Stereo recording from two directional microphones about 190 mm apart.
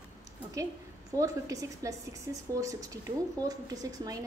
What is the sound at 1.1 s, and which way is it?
A woman's voice, 15° right (ahead or behind).